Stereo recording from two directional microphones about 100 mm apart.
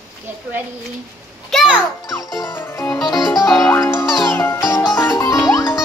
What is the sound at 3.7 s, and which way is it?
Music, 25° left (ahead or behind).